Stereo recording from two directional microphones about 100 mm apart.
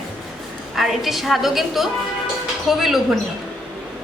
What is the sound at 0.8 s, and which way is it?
A woman's voice, centre (ahead or behind).